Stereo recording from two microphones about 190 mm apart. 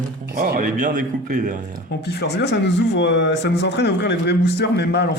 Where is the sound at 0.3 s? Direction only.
50° right (ahead or behind).